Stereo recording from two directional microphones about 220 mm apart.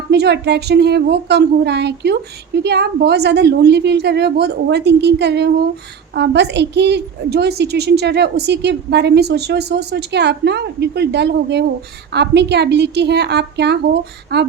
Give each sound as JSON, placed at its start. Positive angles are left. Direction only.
{"t": 0.1, "sound": "a woman's voice", "side_deg": -50}